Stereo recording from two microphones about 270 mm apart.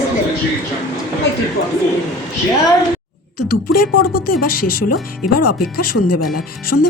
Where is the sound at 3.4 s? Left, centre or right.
Left.